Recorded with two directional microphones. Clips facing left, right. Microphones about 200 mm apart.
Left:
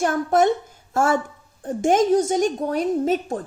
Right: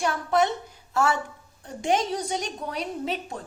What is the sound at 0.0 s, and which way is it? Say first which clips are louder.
A woman's voice: left 5 dB; 45° left (ahead or behind).